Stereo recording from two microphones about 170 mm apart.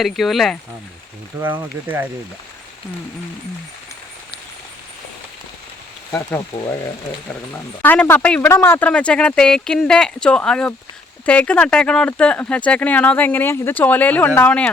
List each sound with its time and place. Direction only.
0.0 s speech: centre (ahead or behind)
1.4 s speech: 10° right (ahead or behind)
6.1 s speech: 15° left (ahead or behind)
7.5 s speech: 10° left (ahead or behind)